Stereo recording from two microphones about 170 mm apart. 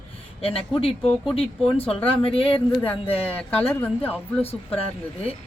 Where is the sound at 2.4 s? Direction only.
10° left (ahead or behind).